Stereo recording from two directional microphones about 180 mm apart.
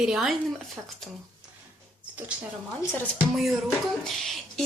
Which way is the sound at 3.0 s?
5° left (ahead or behind).